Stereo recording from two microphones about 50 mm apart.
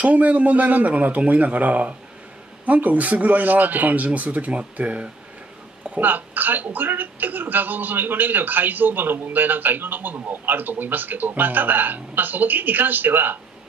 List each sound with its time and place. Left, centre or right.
0.0 s a woman's voice: right